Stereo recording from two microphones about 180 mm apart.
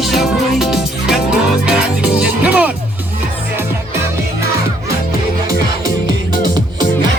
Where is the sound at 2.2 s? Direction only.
5° right (ahead or behind).